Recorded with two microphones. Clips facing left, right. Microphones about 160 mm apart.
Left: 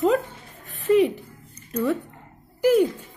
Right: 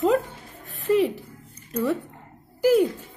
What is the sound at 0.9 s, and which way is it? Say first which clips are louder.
Speech: left 3 dB; centre (ahead or behind).